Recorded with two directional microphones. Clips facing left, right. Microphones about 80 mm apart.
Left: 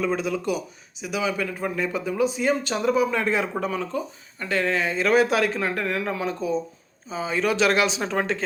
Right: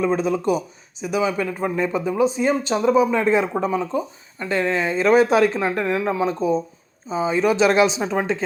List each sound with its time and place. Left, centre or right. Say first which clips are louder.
0.0 s a man's voice: right 5 dB; right